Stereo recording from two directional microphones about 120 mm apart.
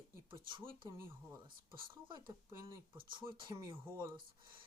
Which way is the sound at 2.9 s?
45° right (ahead or behind).